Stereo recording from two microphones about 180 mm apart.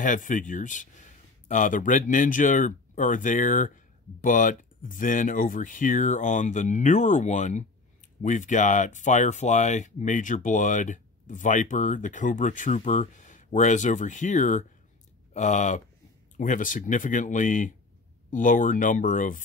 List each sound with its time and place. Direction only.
0.0 s speech: 45° left (ahead or behind)